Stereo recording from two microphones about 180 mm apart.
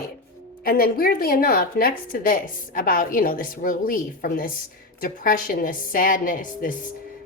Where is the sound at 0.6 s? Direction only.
55° left (ahead or behind).